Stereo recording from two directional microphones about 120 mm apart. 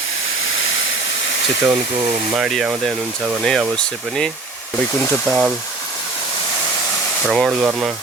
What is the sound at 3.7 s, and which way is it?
Speech, 5° left (ahead or behind).